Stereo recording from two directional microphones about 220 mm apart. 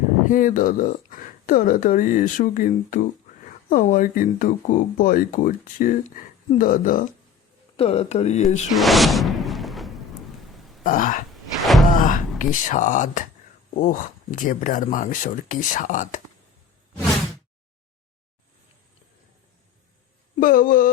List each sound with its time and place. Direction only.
0.3 s speech: 40° left (ahead or behind)
7.8 s speech: 30° left (ahead or behind)
8.7 s whoosh: centre (ahead or behind)
10.8 s speech: 35° left (ahead or behind)
11.6 s thunk: centre (ahead or behind)
11.9 s thunk: 40° left (ahead or behind)
12.4 s speech: 35° left (ahead or behind)
20.4 s speech: 40° left (ahead or behind)